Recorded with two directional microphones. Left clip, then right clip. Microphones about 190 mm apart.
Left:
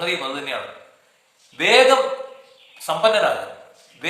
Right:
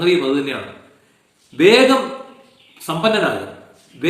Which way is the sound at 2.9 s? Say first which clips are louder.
Left 1 dB; 15° left (ahead or behind).